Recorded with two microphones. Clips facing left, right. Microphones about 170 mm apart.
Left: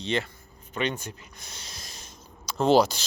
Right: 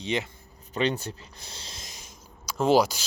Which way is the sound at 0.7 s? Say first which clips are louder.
Right 3 dB; 35° right (ahead or behind).